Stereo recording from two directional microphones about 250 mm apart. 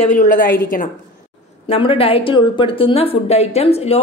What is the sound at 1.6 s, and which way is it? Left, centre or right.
A woman's voice, left.